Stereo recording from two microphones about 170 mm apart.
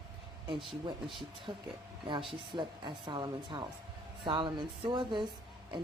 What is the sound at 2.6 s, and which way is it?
Speech, 25° right (ahead or behind).